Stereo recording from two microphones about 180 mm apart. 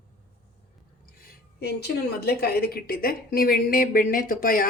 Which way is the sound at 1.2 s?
60° left (ahead or behind).